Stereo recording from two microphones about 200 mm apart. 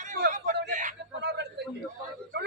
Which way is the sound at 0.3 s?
35° right (ahead or behind).